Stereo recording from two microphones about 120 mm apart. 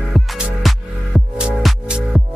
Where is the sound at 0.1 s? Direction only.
Centre (ahead or behind).